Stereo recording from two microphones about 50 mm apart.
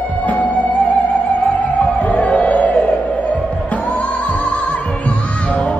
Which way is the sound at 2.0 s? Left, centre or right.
Left.